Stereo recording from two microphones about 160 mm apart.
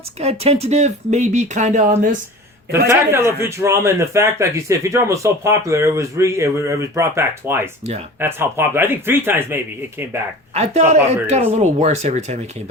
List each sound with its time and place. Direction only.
0.2 s speech: 40° right (ahead or behind)
2.9 s a man's voice: 15° right (ahead or behind)
10.5 s speech: 40° right (ahead or behind)